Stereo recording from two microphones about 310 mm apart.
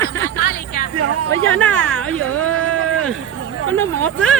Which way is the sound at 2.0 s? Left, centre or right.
Right.